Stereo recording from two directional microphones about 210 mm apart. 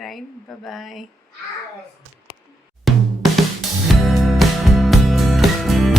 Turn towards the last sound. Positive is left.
turn(degrees=0)  # may be behind; listen again after turning